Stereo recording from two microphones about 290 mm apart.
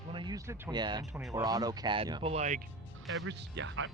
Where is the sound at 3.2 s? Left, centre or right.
Right.